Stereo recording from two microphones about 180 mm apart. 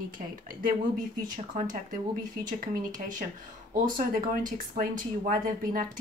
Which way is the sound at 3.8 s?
50° right (ahead or behind).